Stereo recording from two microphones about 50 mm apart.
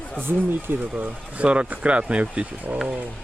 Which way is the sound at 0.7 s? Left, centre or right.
Right.